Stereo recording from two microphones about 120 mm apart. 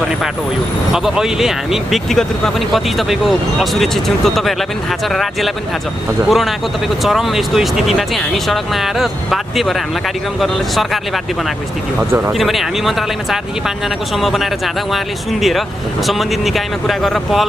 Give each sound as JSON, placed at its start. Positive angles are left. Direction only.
{"t": 0.9, "sound": "speech", "side_deg": -5}
{"t": 12.0, "sound": "speech", "side_deg": -15}
{"t": 12.3, "sound": "speech", "side_deg": 0}
{"t": 16.1, "sound": "speech", "side_deg": 0}